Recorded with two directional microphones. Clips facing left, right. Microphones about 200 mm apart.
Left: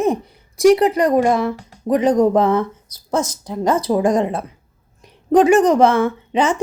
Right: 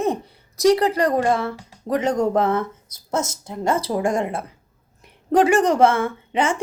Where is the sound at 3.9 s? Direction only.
20° left (ahead or behind).